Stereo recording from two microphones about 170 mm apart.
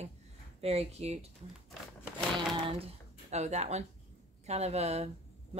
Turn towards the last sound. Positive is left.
turn(degrees=-40)  # may be behind; listen again after turning